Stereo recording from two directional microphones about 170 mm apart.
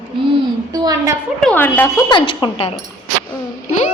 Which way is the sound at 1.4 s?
10° left (ahead or behind).